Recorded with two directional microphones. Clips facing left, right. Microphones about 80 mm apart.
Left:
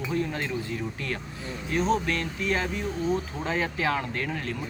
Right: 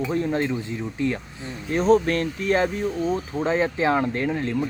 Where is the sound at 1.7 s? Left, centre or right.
Right.